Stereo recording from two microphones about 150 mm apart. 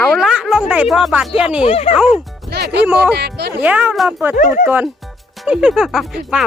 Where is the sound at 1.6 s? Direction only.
45° left (ahead or behind).